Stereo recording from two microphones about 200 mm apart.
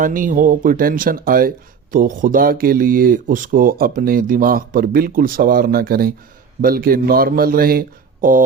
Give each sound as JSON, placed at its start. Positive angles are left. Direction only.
{"t": 0.0, "sound": "speech", "side_deg": -40}